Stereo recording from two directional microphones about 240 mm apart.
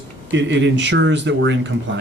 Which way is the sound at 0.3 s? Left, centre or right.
Right.